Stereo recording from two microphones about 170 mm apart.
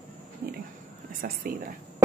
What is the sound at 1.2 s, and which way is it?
Speech, 60° right (ahead or behind).